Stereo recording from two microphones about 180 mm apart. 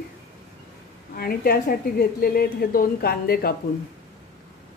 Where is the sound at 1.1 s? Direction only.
55° left (ahead or behind).